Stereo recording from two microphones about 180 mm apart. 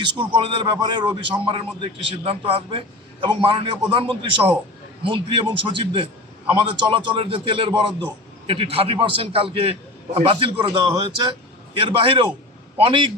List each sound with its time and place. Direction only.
0.0 s a man's voice: 25° right (ahead or behind)